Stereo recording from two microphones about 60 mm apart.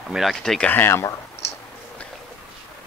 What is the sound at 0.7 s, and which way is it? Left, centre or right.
Speech, left.